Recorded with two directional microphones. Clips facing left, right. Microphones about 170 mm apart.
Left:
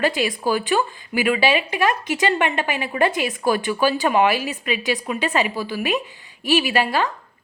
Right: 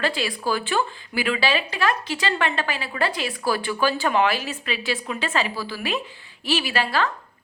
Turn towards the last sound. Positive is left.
turn(degrees=15)  # may be behind; listen again after turning